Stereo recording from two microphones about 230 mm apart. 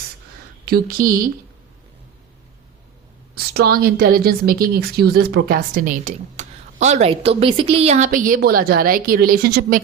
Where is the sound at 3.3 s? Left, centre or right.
Right.